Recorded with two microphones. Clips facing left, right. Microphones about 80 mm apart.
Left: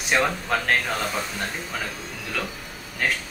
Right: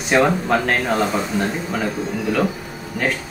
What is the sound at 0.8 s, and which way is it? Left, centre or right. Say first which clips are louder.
Speech: right 8 dB; centre.